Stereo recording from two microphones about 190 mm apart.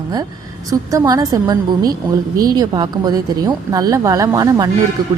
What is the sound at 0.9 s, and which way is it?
Speech, 20° right (ahead or behind).